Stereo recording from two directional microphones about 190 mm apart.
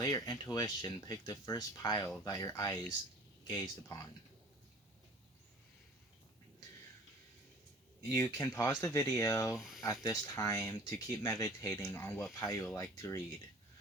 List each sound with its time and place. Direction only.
0.0 s speech: 15° left (ahead or behind)
8.1 s speech: 15° left (ahead or behind)
9.6 s speech: centre (ahead or behind)
9.8 s speech: 20° left (ahead or behind)